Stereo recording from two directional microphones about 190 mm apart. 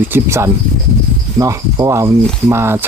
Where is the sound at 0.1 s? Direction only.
15° right (ahead or behind).